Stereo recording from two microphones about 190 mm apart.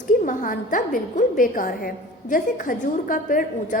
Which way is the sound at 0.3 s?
45° left (ahead or behind).